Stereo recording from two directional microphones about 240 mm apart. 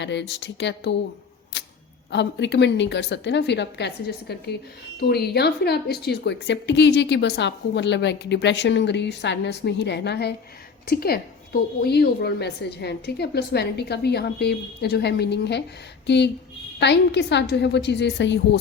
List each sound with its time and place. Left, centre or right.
0.0 s speech: left
2.0 s speech: left